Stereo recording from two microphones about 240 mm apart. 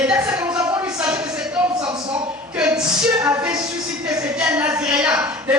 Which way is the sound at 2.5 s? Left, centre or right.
Centre.